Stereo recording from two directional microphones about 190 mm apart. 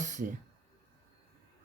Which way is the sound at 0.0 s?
40° right (ahead or behind).